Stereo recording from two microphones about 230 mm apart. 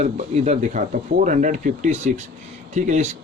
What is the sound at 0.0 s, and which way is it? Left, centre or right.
Speech, right.